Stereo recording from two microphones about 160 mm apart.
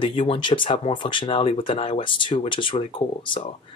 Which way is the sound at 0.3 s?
30° left (ahead or behind).